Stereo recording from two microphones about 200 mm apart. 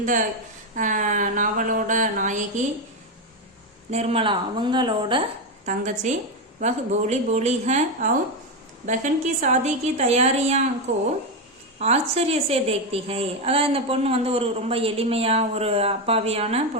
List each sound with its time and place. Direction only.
0.8 s a woman's voice: 40° right (ahead or behind)
3.9 s a woman's voice: 30° right (ahead or behind)
5.6 s a woman's voice: 35° right (ahead or behind)